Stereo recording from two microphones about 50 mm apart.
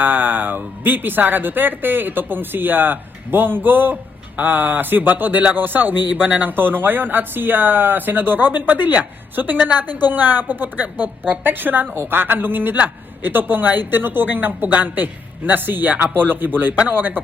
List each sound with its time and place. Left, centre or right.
0.0 s a man's voice: right